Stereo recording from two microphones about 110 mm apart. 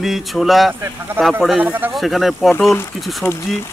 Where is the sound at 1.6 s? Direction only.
15° right (ahead or behind).